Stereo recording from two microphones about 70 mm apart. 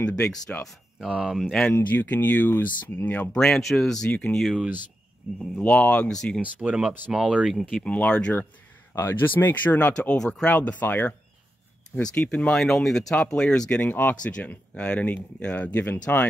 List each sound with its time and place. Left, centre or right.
0.2 s speech: centre
0.9 s speech: centre
1.7 s speech: left
3.3 s speech: centre
5.6 s speech: centre
6.4 s speech: centre
7.8 s speech: centre
8.9 s speech: left
12.0 s speech: centre